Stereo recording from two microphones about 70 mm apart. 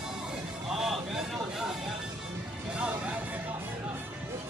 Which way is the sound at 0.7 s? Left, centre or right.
Centre.